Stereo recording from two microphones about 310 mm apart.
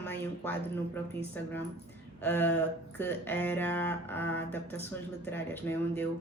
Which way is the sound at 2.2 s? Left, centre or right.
Centre.